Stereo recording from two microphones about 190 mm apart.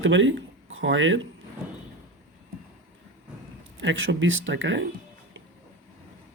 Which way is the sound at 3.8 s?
75° right (ahead or behind).